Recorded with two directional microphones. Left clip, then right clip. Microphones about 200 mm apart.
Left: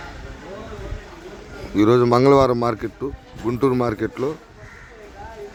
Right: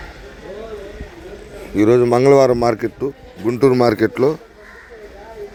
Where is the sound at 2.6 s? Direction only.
10° right (ahead or behind).